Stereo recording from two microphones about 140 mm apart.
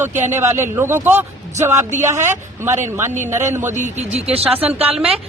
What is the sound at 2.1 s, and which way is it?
Speech, 20° right (ahead or behind).